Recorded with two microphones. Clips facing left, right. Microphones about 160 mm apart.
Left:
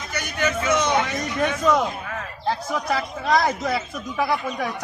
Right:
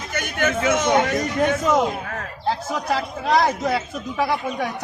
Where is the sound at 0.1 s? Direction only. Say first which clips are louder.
Right 2 dB; 50° right (ahead or behind).